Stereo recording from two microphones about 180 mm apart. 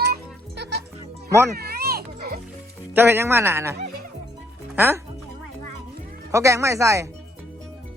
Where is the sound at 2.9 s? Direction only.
10° right (ahead or behind).